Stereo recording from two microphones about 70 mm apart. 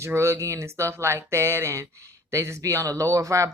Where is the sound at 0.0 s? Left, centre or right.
Right.